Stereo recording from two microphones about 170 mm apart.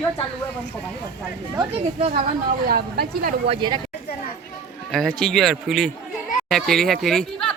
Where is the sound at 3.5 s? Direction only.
25° right (ahead or behind).